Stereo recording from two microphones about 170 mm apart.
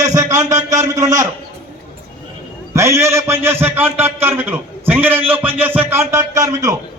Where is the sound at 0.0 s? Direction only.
20° right (ahead or behind).